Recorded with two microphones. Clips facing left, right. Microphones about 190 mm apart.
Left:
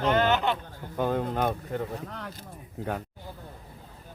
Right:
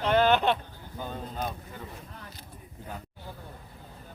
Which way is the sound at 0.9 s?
75° left (ahead or behind).